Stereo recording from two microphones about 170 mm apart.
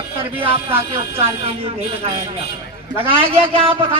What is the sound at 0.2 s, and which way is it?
A man's voice, 30° right (ahead or behind).